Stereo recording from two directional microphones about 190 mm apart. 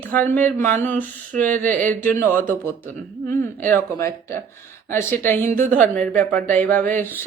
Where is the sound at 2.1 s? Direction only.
10° left (ahead or behind).